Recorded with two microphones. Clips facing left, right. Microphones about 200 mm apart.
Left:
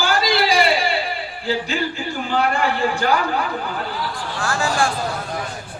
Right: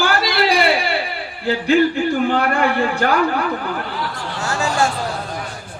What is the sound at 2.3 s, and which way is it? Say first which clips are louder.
Speech: right 2 dB; 60° right (ahead or behind).